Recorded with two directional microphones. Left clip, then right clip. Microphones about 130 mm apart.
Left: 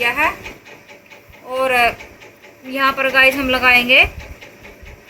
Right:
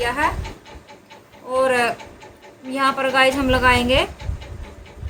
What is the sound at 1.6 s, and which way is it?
Speech, 45° right (ahead or behind).